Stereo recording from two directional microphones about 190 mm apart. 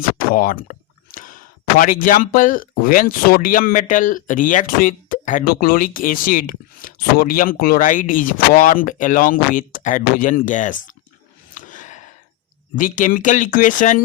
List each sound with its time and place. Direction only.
0.3 s a sound: 45° left (ahead or behind)
1.8 s speech: 45° left (ahead or behind)
11.5 s gasp: 40° left (ahead or behind)
12.7 s speech: 40° left (ahead or behind)